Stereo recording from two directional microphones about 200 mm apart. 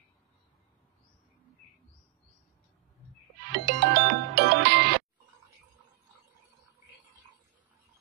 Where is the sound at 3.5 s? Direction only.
60° right (ahead or behind).